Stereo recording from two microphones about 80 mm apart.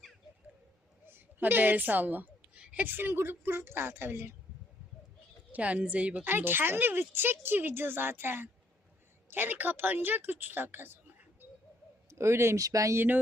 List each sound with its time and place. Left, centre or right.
1.0 s a woman's voice: right
5.5 s a woman's voice: centre
12.1 s speech: right